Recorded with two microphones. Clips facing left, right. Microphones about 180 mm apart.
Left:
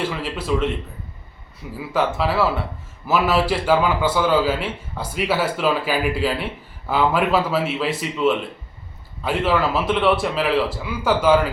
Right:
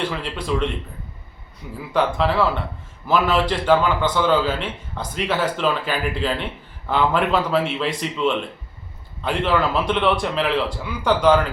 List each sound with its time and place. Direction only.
0.0 s a man's voice: 5° left (ahead or behind)
1.7 s a man's voice: 5° left (ahead or behind)